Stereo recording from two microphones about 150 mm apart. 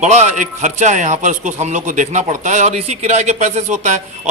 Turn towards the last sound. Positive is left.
turn(degrees=-50)  # may be behind; listen again after turning